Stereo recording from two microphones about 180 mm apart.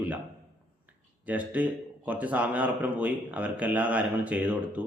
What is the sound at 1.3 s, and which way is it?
A man's voice, 10° right (ahead or behind).